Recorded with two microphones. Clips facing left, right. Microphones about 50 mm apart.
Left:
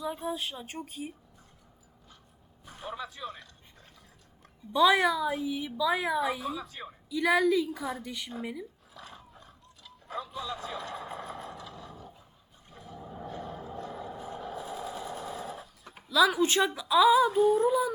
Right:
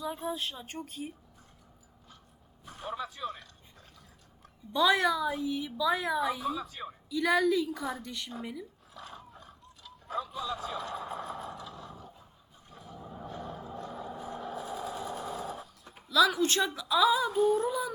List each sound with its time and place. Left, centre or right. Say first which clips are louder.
0.0 s a woman's voice: left 1 dB; centre
2.7 s dog: right 1 dB; centre
4.7 s a woman's voice: left 3 dB; centre
9.8 s a sound: right 2 dB; centre
11.8 s a sound: even; right
12.7 s a sound: left 1 dB; centre
13.9 s vehicle: even; centre
14.3 s sewing machine: right 1 dB; centre
15.4 s dog: right 1 dB; centre
16.0 s a woman's voice: left 1 dB; centre